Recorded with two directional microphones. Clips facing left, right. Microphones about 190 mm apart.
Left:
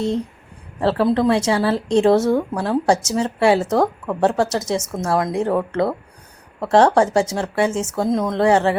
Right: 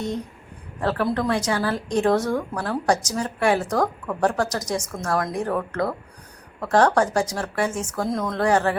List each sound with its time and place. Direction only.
0.8 s speech: 30° left (ahead or behind)